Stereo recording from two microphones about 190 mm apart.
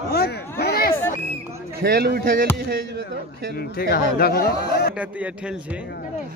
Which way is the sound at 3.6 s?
55° left (ahead or behind).